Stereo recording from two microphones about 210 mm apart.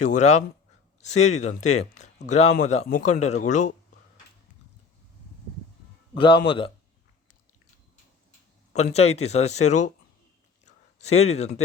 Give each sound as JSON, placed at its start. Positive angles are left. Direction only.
{"t": 0.0, "sound": "speech", "side_deg": 35}
{"t": 6.1, "sound": "a man's voice", "side_deg": 25}
{"t": 8.7, "sound": "speech", "side_deg": 30}
{"t": 10.7, "sound": "a sound", "side_deg": 30}